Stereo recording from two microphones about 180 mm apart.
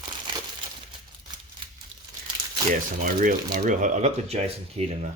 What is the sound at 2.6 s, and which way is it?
Speech, 45° right (ahead or behind).